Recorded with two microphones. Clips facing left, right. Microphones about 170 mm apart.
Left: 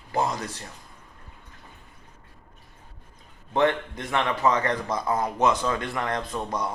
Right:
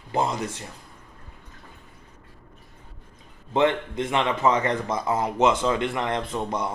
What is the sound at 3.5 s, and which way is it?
A man's voice, 20° right (ahead or behind).